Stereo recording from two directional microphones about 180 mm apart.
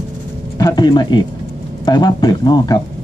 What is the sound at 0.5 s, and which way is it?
Speech, 20° left (ahead or behind).